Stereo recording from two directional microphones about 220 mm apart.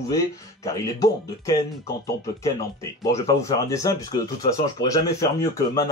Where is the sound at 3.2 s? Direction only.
15° left (ahead or behind).